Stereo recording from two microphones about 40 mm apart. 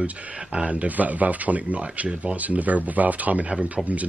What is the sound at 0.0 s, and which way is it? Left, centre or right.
Speech, right.